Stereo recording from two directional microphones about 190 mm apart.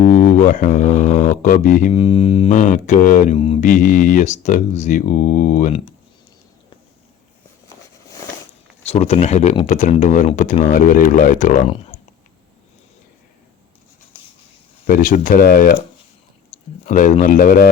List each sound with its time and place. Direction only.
0.0 s speech: 40° left (ahead or behind)
8.9 s speech: 35° left (ahead or behind)
14.8 s speech: 45° left (ahead or behind)